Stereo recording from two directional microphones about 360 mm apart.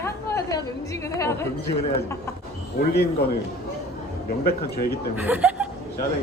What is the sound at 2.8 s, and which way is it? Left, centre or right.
Speech, left.